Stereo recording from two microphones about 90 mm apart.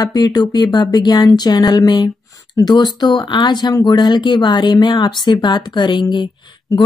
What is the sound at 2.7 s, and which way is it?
Speech, 50° left (ahead or behind).